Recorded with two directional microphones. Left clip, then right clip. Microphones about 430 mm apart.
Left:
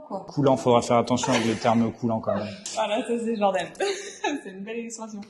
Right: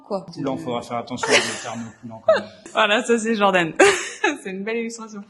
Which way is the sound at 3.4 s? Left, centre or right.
Right.